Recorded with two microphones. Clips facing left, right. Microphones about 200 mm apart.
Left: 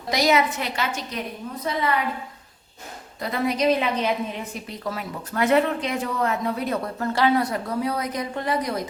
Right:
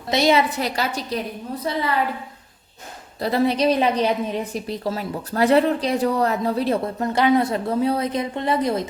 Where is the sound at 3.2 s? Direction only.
30° right (ahead or behind).